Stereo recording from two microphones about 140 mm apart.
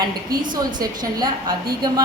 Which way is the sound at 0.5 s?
30° right (ahead or behind).